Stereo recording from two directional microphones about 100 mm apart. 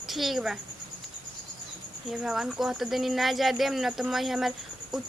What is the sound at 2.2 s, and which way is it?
Speech, 5° right (ahead or behind).